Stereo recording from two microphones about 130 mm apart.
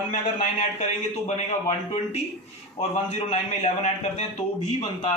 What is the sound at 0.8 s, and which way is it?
A man's voice, 55° left (ahead or behind).